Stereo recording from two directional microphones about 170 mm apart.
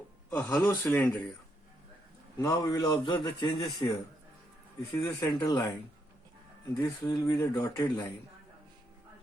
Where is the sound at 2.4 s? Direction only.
20° left (ahead or behind).